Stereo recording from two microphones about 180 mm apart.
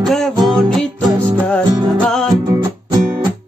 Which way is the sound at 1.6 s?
25° right (ahead or behind).